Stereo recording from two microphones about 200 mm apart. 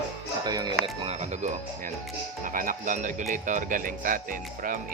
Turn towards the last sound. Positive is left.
turn(degrees=-45)  # may be behind; listen again after turning